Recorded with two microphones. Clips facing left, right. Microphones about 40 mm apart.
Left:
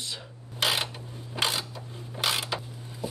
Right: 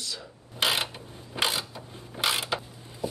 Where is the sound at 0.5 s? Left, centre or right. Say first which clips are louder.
Right 1 dB; right.